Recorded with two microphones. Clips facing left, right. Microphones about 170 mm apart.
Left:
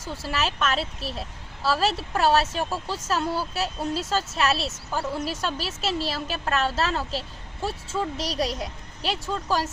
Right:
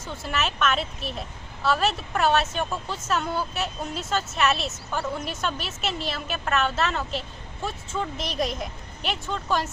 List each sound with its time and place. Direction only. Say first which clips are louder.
0.3 s speech: right 1 dB; 30° left (ahead or behind)